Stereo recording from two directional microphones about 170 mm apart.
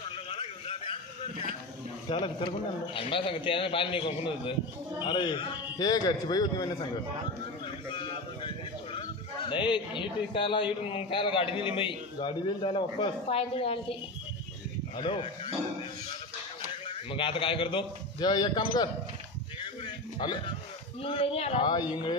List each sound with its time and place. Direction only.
0.3 s a sound: 35° left (ahead or behind)
2.0 s a man's voice: 30° left (ahead or behind)
7.6 s a sound: 30° left (ahead or behind)
9.5 s a man's voice: 30° left (ahead or behind)
15.0 s a man's voice: 30° left (ahead or behind)
16.8 s a man's voice: 30° left (ahead or behind)
20.2 s a man's voice: 30° left (ahead or behind)